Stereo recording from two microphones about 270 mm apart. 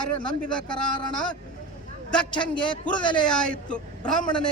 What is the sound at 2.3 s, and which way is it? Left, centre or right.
Speech, centre.